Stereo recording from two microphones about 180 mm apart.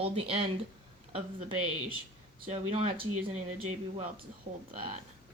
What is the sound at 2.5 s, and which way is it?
Speech, 35° right (ahead or behind).